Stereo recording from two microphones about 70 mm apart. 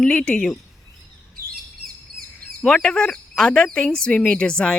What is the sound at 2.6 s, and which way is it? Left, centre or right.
A woman's voice, centre.